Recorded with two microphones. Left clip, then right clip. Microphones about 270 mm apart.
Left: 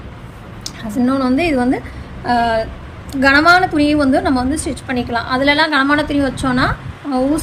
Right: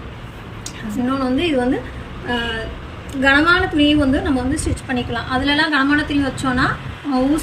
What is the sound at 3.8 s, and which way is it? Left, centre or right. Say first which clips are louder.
A woman's voice: left 2 dB; centre.